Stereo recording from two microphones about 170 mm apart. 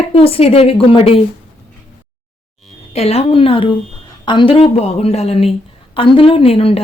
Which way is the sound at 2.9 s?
35° left (ahead or behind).